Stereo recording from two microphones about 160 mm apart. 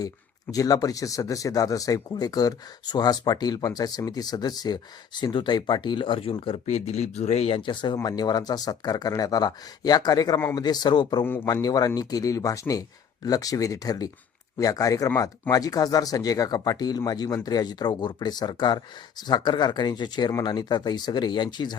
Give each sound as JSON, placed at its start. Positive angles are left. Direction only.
{"t": 0.5, "sound": "speech", "side_deg": 20}
{"t": 6.7, "sound": "speech", "side_deg": 45}